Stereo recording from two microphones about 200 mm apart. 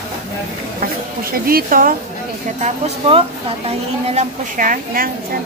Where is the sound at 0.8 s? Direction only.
45° right (ahead or behind).